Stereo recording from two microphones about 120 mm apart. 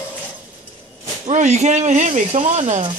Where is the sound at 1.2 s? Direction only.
80° right.